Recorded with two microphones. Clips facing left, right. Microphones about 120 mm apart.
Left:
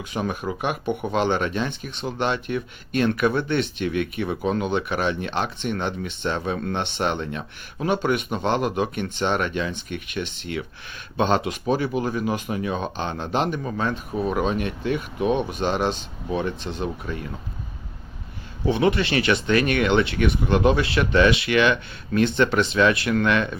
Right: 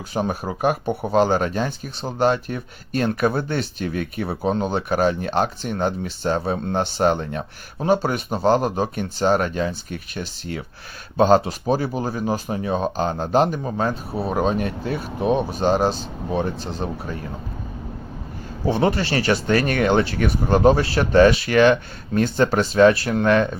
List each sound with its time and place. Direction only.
0.1 s speech: 35° right (ahead or behind)
18.6 s speech: 40° right (ahead or behind)